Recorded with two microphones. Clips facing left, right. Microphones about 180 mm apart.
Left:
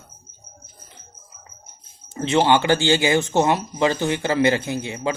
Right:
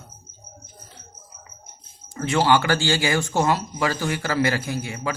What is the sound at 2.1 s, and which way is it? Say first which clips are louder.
Speech: left 2 dB; 20° left (ahead or behind).